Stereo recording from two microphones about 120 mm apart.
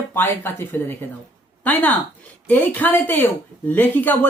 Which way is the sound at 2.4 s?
15° left (ahead or behind).